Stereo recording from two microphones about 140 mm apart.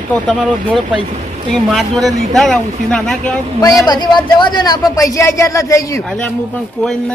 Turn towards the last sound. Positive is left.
turn(degrees=20)  # may be behind; listen again after turning